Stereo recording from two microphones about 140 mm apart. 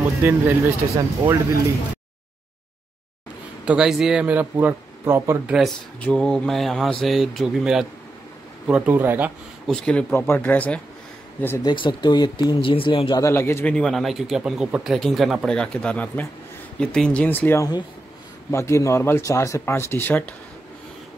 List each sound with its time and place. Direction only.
0.2 s speech: 15° right (ahead or behind)
3.6 s speech: 5° right (ahead or behind)
5.5 s speech: centre (ahead or behind); by 9.3 s 15° right (ahead or behind)
9.7 s speech: 5° left (ahead or behind)
11.6 s speech: 35° left (ahead or behind)
13.2 s speech: 20° left (ahead or behind)
13.7 s speech: centre (ahead or behind)